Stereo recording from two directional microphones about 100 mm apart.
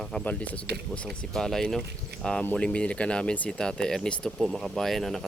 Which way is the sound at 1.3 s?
5° left (ahead or behind).